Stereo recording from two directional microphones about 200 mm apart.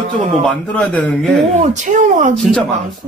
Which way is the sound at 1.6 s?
40° right (ahead or behind).